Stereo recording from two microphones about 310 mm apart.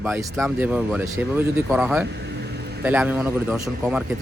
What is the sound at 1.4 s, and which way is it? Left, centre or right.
Speech, right.